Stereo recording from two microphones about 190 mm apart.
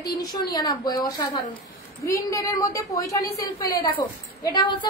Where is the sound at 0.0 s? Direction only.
20° left (ahead or behind).